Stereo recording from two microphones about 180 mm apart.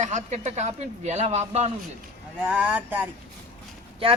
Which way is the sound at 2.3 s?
10° right (ahead or behind).